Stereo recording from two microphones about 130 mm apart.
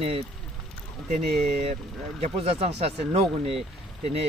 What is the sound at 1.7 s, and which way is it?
Speech, 55° right (ahead or behind).